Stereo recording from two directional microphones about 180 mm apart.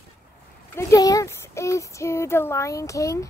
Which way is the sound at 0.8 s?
20° left (ahead or behind).